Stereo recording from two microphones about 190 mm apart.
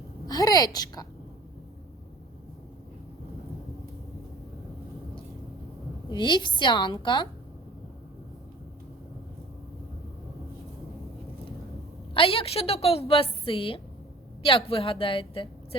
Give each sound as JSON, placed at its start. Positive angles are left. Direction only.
{"t": 0.3, "sound": "a woman's voice", "side_deg": 20}
{"t": 6.1, "sound": "a woman's voice", "side_deg": 25}
{"t": 12.1, "sound": "a woman's voice", "side_deg": 30}